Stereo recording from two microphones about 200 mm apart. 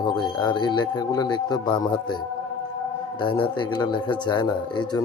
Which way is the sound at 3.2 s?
25° left (ahead or behind).